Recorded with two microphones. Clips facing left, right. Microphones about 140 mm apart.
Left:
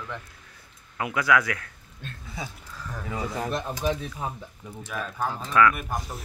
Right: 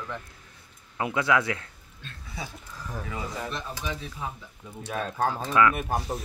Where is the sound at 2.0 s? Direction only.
50° left (ahead or behind).